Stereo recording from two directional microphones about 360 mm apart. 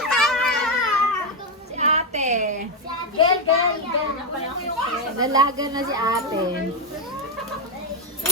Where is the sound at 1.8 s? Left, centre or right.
Centre.